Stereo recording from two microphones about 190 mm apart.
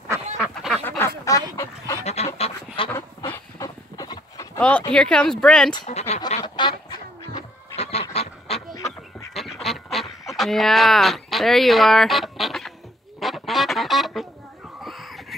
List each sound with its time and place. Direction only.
0.4 s duck: centre (ahead or behind)
0.8 s duck: 10° left (ahead or behind)
2.0 s duck: 35° left (ahead or behind)
2.9 s chicken: 15° left (ahead or behind)
4.6 s speech: 5° left (ahead or behind)
5.9 s a sound: 35° left (ahead or behind)
6.4 s duck: 25° left (ahead or behind)
7.7 s goose: 35° left (ahead or behind)
9.3 s duck: centre (ahead or behind)
13.2 s goose: centre (ahead or behind)
14.8 s a sound: centre (ahead or behind)